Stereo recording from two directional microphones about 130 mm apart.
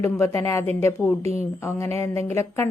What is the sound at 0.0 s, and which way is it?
A woman's voice, 20° left (ahead or behind).